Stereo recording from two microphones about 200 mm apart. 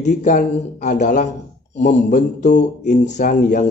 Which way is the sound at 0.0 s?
35° left (ahead or behind).